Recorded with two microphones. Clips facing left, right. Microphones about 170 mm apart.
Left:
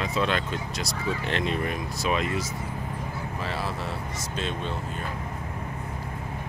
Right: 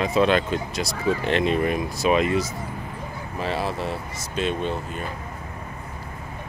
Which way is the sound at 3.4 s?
20° right (ahead or behind).